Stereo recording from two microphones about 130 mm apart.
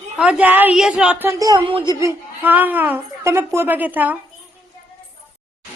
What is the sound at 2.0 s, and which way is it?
Speech, 20° right (ahead or behind).